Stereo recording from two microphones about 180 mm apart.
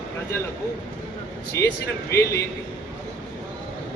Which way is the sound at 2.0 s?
15° left (ahead or behind).